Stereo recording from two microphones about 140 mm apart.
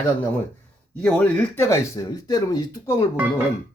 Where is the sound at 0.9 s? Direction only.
5° left (ahead or behind); by 3.0 s 25° left (ahead or behind).